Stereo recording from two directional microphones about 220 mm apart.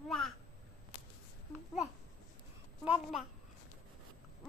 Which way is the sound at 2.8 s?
5° right (ahead or behind).